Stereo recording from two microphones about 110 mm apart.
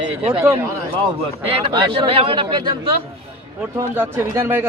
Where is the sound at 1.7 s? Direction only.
50° right (ahead or behind).